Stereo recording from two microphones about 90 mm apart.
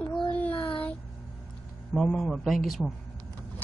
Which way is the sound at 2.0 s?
5° left (ahead or behind).